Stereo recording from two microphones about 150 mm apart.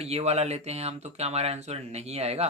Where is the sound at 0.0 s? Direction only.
45° right (ahead or behind).